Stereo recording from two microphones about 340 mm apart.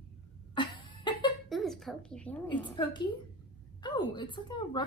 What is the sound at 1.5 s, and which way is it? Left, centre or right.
A woman's voice, centre.